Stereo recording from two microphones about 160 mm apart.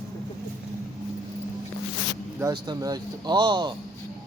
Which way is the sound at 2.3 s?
25° right (ahead or behind).